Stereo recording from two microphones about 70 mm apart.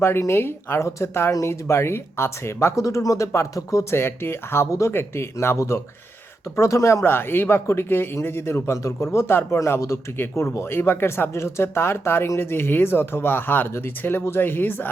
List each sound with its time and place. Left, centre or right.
0.0 s speech: left
1.3 s speech: left
7.0 s speech: left